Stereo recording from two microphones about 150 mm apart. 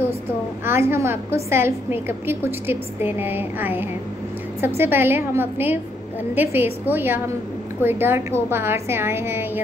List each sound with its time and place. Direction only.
0.7 s a woman's voice: 15° right (ahead or behind)